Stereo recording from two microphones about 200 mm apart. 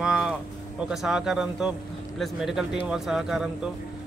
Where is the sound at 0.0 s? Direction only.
5° right (ahead or behind).